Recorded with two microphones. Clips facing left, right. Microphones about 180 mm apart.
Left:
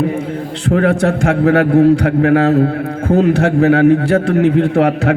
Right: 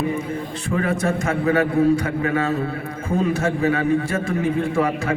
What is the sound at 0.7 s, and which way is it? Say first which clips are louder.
A man's voice: left 8 dB; 75° left (ahead or behind).